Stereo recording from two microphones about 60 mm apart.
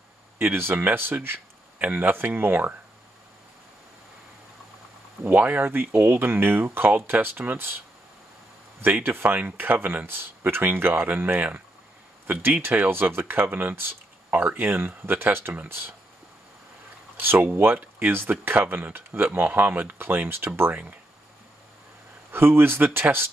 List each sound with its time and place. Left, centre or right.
0.4 s speech: right
1.8 s speech: right
5.2 s speech: right
8.8 s speech: right
17.2 s speech: right
22.3 s speech: right